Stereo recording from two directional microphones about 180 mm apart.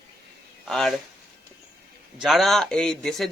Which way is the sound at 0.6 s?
Centre (ahead or behind).